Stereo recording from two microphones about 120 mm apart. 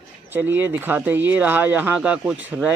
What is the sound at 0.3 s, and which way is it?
Speech, 15° right (ahead or behind).